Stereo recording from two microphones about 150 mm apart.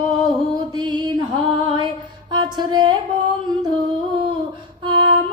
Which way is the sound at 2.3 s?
30° right (ahead or behind).